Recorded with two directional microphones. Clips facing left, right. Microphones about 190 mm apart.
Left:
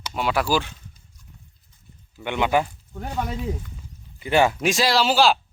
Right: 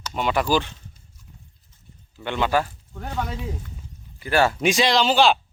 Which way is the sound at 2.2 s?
15° left (ahead or behind).